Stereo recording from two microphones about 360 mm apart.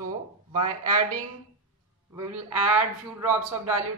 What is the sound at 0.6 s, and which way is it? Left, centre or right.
Speech, right.